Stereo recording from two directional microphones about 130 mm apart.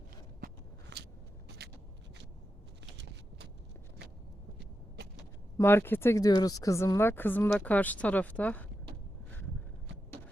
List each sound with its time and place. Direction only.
5.5 s speech: 20° left (ahead or behind)